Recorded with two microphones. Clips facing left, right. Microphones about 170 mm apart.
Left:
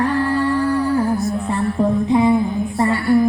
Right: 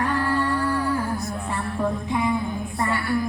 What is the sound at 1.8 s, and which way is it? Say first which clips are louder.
Music: left 9 dB; 30° left (ahead or behind).